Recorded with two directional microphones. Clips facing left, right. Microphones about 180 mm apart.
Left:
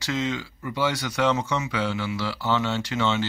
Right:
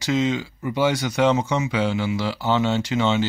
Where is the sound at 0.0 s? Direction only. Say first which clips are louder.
Right 6 dB; 20° right (ahead or behind).